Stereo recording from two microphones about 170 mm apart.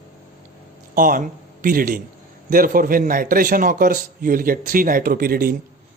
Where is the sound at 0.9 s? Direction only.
50° right (ahead or behind).